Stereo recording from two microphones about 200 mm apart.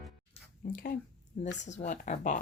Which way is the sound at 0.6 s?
45° left (ahead or behind).